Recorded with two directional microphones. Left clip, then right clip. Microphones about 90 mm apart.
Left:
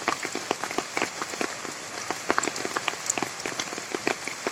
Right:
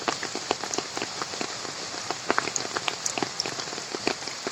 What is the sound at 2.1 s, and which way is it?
Rain on surface, 35° left (ahead or behind).